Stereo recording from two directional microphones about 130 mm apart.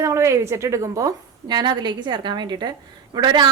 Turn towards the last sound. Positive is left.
turn(degrees=-35)  # may be behind; listen again after turning